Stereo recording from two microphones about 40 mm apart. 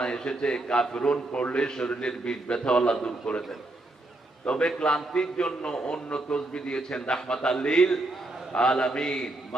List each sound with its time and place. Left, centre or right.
0.0 s a man's voice: centre
1.6 s a man's voice: centre
4.4 s a man's voice: left